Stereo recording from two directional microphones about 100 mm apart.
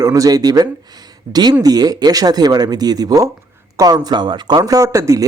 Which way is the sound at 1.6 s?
40° right (ahead or behind).